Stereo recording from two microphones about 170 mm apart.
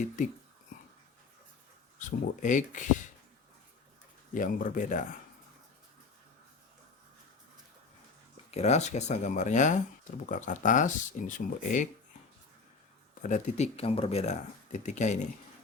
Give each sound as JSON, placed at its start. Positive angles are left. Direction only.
{"t": 2.0, "sound": "speech", "side_deg": 50}
{"t": 4.4, "sound": "speech", "side_deg": 50}
{"t": 8.4, "sound": "speech", "side_deg": 40}
{"t": 13.2, "sound": "speech", "side_deg": 45}